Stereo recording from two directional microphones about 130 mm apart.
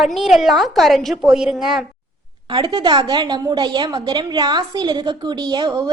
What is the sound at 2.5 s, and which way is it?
A woman's voice, 35° right (ahead or behind).